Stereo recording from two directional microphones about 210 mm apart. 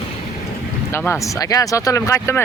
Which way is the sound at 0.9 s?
10° left (ahead or behind).